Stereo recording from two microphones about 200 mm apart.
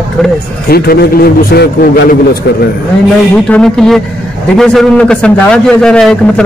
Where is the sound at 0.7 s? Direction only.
50° left (ahead or behind).